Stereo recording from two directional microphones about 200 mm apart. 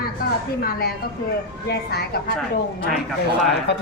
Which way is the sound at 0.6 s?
50° left (ahead or behind).